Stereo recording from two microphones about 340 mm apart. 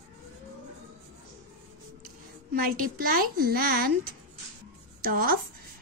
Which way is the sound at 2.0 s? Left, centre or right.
Right.